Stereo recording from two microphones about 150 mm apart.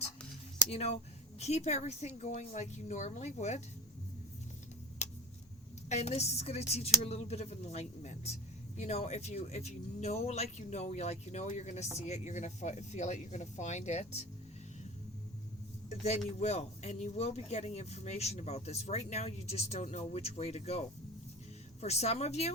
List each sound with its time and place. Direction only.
0.7 s speech: 45° left (ahead or behind)
5.0 s a sound: 50° left (ahead or behind)
5.9 s speech: 45° left (ahead or behind)
15.9 s speech: 45° left (ahead or behind)